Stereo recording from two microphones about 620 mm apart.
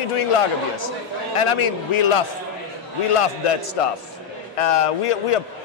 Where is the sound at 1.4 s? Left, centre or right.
Left.